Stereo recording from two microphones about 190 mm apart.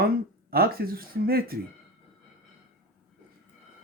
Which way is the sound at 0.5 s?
50° right (ahead or behind).